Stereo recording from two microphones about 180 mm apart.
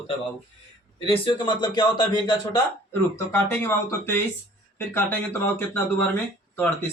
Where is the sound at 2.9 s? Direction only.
10° left (ahead or behind).